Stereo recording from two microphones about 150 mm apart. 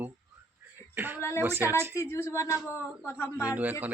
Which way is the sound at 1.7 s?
15° right (ahead or behind).